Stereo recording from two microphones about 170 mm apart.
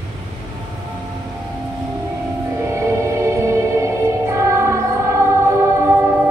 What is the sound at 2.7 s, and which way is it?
Music, 15° right (ahead or behind).